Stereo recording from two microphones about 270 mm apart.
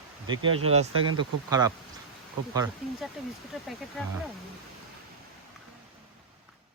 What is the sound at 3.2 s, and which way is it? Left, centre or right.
Speech, centre.